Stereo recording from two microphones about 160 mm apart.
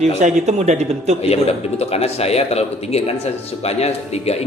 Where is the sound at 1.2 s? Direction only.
40° left (ahead or behind).